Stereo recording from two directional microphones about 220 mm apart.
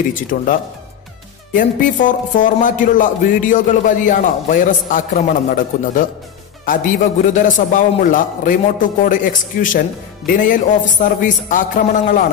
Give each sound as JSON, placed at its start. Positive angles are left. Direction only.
{"t": 0.3, "sound": "a man's voice", "side_deg": 35}
{"t": 1.5, "sound": "a man's voice", "side_deg": 35}